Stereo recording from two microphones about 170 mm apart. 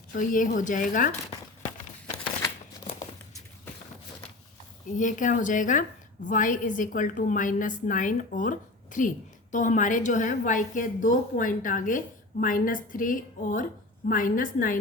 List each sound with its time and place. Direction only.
0.1 s a woman's voice: 50° left (ahead or behind)
4.9 s a woman's voice: 50° left (ahead or behind)